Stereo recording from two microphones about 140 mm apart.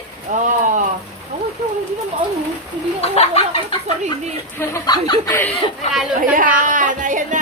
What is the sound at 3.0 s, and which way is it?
Speech, 45° left (ahead or behind).